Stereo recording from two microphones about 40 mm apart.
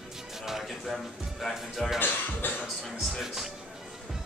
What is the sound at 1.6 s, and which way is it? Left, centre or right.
Speech, centre.